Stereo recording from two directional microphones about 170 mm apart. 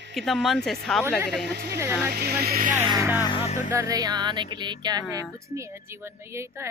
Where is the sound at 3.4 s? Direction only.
45° left (ahead or behind).